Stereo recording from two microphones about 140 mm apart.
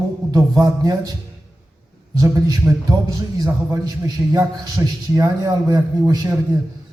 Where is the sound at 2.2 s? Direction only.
25° right (ahead or behind).